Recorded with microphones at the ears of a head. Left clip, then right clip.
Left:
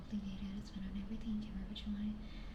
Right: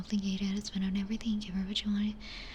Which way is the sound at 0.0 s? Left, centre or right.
Right.